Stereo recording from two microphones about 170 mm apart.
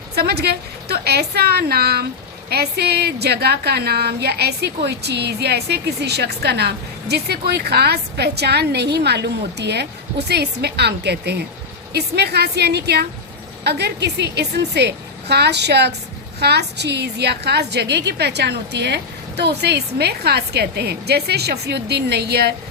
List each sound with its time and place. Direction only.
0.2 s a woman's voice: 70° right (ahead or behind)